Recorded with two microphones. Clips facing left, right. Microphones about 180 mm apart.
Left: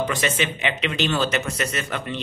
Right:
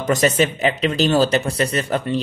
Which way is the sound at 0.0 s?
40° right (ahead or behind).